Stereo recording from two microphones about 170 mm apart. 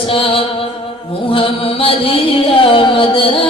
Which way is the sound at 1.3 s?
30° left (ahead or behind).